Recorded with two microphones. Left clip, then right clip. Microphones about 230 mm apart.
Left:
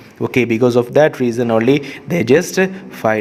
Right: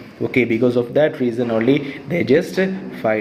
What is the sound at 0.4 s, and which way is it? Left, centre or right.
Speech, left.